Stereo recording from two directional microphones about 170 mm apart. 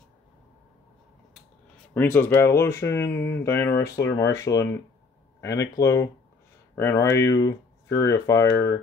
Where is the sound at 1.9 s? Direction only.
10° left (ahead or behind).